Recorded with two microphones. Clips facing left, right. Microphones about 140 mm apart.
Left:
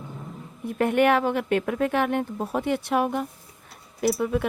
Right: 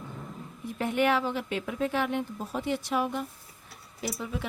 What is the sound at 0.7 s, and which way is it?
Speech, 60° left (ahead or behind).